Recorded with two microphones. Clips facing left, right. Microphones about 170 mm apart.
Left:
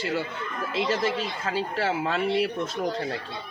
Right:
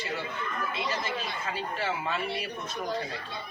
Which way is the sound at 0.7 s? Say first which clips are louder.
Left 11 dB; 90° left.